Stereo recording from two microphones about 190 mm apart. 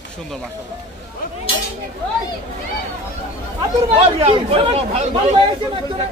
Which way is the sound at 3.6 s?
30° right (ahead or behind).